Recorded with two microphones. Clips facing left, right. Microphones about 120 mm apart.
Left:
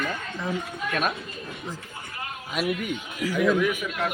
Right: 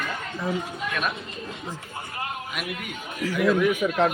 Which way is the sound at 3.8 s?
50° right (ahead or behind).